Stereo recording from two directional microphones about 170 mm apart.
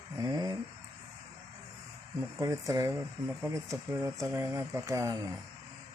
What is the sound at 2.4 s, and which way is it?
Speech, 20° right (ahead or behind).